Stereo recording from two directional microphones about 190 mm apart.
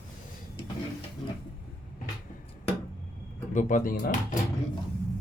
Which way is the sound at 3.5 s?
45° left (ahead or behind).